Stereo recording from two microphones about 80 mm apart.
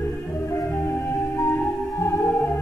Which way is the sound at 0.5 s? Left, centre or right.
Left.